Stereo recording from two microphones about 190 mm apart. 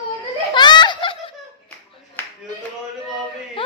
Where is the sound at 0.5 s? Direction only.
25° left (ahead or behind).